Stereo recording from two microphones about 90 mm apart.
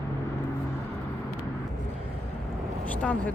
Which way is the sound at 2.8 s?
15° left (ahead or behind).